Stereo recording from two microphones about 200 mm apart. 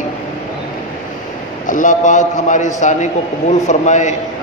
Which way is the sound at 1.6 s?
40° left (ahead or behind).